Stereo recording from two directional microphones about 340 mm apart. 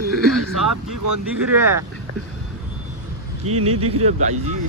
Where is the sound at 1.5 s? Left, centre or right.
Centre.